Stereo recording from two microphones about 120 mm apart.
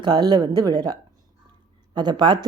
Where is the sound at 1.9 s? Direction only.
40° right (ahead or behind).